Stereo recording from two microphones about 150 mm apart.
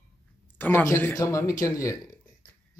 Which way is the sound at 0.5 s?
15° left (ahead or behind).